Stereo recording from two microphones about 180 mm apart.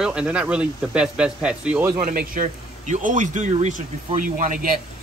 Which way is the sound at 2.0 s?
50° right (ahead or behind).